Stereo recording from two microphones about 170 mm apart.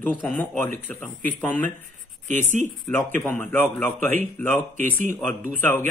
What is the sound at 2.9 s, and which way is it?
Speech, 10° left (ahead or behind).